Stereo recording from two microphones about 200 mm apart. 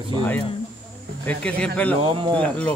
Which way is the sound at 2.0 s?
25° right (ahead or behind).